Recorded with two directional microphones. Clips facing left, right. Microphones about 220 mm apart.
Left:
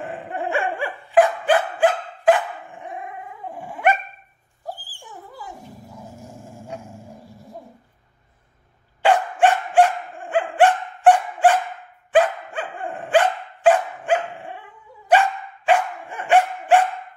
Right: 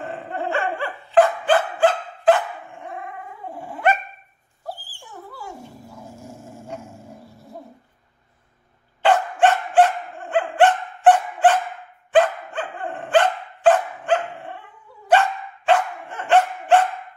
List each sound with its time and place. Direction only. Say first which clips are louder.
0.3 s dog: even; 15° left (ahead or behind)
9.0 s dog: even; 10° left (ahead or behind)